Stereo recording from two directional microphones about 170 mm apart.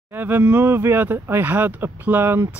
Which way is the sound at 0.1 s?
10° right (ahead or behind).